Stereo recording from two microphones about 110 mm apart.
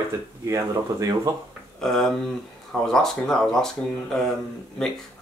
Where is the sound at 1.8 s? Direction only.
5° left (ahead or behind).